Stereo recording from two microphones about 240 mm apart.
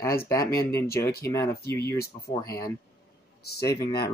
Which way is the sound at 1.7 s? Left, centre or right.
Centre.